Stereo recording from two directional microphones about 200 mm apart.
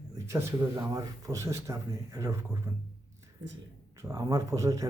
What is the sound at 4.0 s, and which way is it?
Speech, 15° right (ahead or behind).